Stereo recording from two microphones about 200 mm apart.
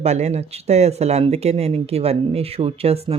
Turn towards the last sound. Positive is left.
turn(degrees=-30)  # may be behind; listen again after turning